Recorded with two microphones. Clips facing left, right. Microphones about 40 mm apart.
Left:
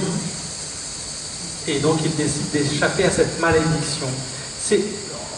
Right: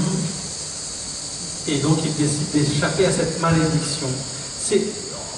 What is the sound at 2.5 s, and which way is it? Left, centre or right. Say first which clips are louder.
Speech: right 1 dB; left.